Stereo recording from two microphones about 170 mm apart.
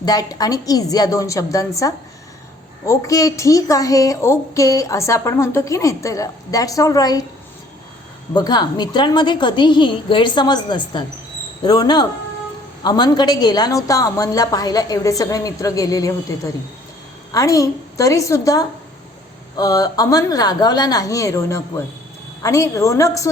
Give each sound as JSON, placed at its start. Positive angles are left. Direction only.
{"t": 0.0, "sound": "a woman's voice", "side_deg": 20}
{"t": 8.3, "sound": "a woman's voice", "side_deg": 25}
{"t": 17.3, "sound": "a woman's voice", "side_deg": 20}